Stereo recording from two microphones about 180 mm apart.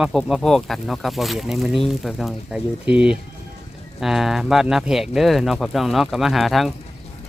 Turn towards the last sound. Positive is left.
turn(degrees=0)  # may be behind; listen again after turning